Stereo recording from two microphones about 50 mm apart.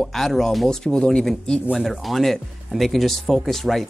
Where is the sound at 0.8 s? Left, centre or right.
Centre.